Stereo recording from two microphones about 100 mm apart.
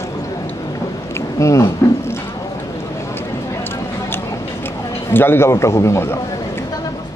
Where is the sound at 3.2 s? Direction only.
20° left (ahead or behind).